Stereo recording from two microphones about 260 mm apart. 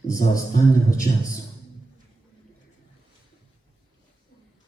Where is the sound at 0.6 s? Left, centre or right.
Left.